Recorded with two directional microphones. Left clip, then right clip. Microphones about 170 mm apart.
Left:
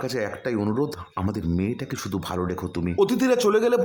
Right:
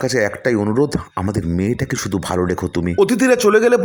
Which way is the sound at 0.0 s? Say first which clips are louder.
Right 10 dB; 25° right (ahead or behind).